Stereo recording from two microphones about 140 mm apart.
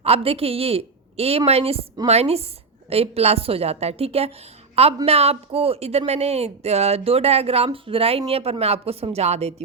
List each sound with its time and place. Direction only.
0.0 s speech: 45° right (ahead or behind)